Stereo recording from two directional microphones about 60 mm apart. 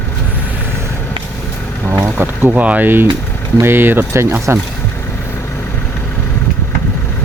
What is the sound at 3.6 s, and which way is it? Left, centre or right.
Speech, right.